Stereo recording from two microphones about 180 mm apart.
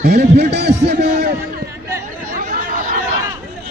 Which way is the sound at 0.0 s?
60° right (ahead or behind).